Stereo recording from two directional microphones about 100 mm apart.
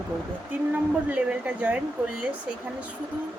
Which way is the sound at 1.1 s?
15° right (ahead or behind).